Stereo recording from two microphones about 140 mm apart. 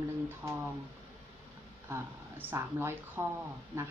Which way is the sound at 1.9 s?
15° right (ahead or behind).